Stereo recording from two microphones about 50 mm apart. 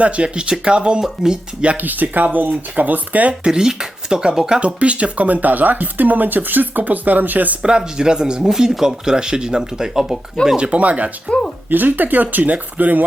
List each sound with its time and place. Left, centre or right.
0.0 s speech: right
1.6 s speech: right
3.4 s speech: centre
4.6 s speech: right
7.6 s speech: centre
10.6 s speech: right